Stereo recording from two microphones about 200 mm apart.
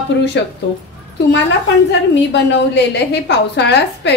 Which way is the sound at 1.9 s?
60° left (ahead or behind).